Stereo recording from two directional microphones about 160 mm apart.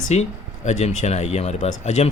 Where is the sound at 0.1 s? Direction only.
45° left (ahead or behind).